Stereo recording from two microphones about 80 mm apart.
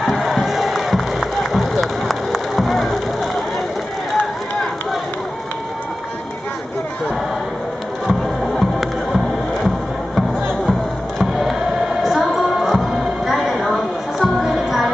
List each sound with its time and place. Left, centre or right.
0.0 s music: centre
8.1 s music: centre
11.1 s a sound: centre
14.2 s music: centre